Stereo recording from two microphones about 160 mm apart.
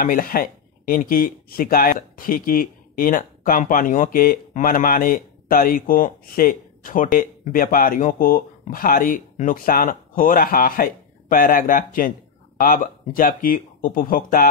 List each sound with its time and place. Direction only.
0.0 s speech: 65° left (ahead or behind)